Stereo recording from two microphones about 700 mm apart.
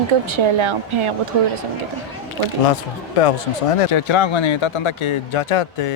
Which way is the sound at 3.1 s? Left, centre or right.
Left.